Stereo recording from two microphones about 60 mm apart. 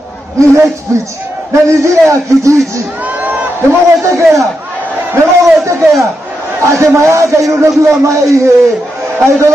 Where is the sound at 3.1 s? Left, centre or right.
Right.